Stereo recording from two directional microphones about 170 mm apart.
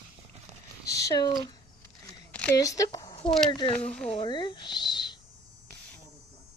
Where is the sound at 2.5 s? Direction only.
20° left (ahead or behind).